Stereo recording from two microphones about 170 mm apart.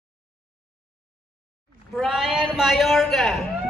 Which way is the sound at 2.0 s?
Centre (ahead or behind).